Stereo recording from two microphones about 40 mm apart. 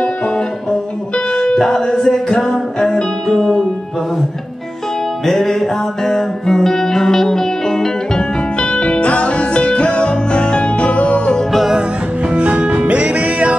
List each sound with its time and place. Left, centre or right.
1.1 s music: left
1.6 s music: centre
5.2 s music: centre; by 11.3 s left
12.3 s music: right